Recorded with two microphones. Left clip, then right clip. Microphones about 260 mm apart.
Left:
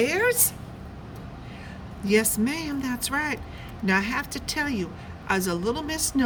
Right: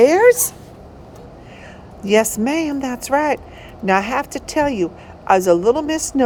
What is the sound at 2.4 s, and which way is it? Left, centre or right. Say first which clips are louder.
A woman's voice: right 9 dB; centre.